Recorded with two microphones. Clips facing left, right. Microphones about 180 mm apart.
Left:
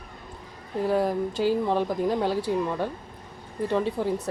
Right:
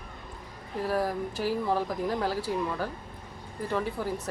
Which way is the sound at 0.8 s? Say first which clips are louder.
Left 5 dB; 25° left (ahead or behind).